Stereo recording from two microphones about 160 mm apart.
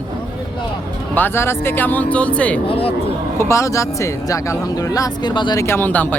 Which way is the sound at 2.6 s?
35° left (ahead or behind).